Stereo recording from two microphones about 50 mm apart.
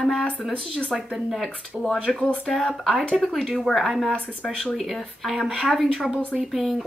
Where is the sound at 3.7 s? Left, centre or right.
Centre.